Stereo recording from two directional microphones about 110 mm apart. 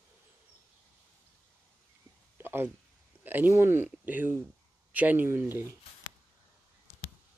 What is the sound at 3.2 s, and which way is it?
Speech, 15° right (ahead or behind).